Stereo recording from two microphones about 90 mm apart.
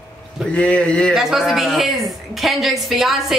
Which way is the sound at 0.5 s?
10° left (ahead or behind).